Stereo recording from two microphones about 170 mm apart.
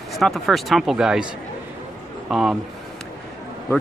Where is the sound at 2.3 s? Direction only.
Centre (ahead or behind).